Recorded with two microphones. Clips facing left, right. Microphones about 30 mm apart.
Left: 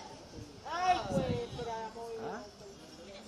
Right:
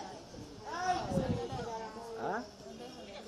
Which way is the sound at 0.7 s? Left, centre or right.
Left.